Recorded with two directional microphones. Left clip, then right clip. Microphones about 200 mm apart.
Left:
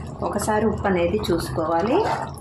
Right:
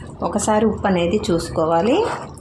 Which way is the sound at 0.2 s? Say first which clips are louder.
Right 4 dB; 45° right (ahead or behind).